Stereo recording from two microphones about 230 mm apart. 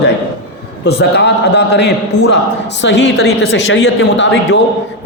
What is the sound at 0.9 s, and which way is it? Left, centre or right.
A man's voice, left.